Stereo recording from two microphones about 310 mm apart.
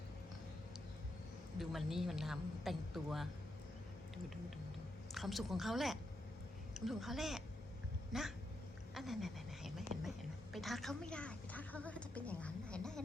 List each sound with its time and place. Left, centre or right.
1.5 s a woman's voice: centre
5.1 s a woman's voice: centre
9.0 s a sound: centre